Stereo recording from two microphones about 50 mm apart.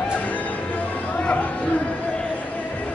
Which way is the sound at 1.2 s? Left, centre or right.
Left.